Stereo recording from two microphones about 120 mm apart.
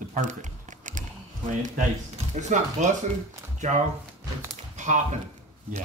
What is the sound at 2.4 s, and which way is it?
Speech, 80° right.